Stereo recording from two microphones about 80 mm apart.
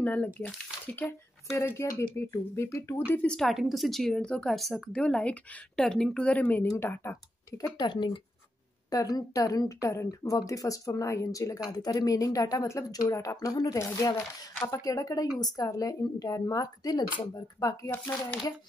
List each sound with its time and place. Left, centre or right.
0.0 s speech: left
1.5 s speech: left
3.3 s speech: centre; by 7.2 s left
7.5 s speech: left
8.9 s a woman's voice: left
11.7 s a woman's voice: left
13.7 s a woman's voice: left
17.9 s speech: left